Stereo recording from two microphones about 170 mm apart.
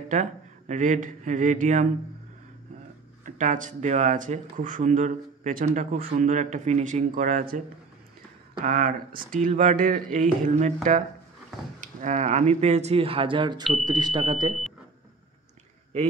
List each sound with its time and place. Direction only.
0.1 s speech: 45° right (ahead or behind)
3.3 s speech: 45° right (ahead or behind)
8.6 s speech: 50° right (ahead or behind)
12.0 s speech: 45° right (ahead or behind); by 14.5 s 25° right (ahead or behind)